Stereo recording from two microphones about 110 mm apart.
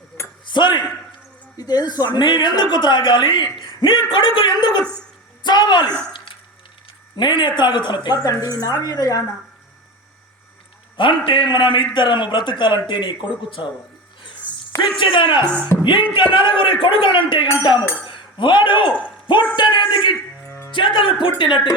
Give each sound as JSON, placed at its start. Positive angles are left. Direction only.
{"t": 0.4, "sound": "a sound", "side_deg": 45}
{"t": 1.5, "sound": "a woman's voice", "side_deg": 40}
{"t": 7.2, "sound": "a woman's voice", "side_deg": 45}
{"t": 10.9, "sound": "a man's voice", "side_deg": 50}
{"t": 14.9, "sound": "a man's voice", "side_deg": 50}